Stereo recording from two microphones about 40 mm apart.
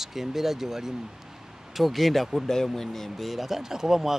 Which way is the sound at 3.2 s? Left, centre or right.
Centre.